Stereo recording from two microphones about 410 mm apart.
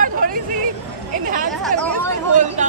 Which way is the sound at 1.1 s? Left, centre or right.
Centre.